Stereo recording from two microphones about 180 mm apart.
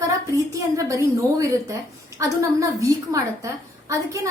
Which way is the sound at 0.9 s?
15° right (ahead or behind).